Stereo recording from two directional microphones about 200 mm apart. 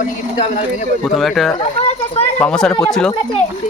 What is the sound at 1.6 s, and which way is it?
Children playing, 30° left (ahead or behind).